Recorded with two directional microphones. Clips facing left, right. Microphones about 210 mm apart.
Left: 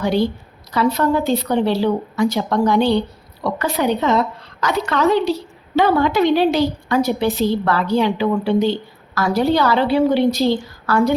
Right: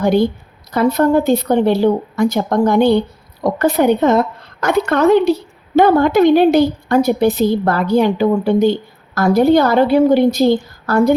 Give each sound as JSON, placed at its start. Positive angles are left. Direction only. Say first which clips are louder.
{"t": 0.0, "sound": "a woman's voice", "louder": "right 4 dB", "side_deg": -50}